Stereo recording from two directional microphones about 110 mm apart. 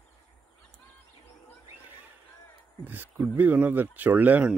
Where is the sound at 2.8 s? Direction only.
15° right (ahead or behind).